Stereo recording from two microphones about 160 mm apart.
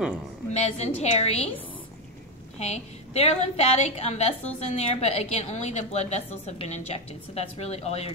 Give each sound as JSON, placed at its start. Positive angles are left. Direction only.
{"t": 0.5, "sound": "a woman's voice", "side_deg": 40}
{"t": 2.6, "sound": "a woman's voice", "side_deg": 45}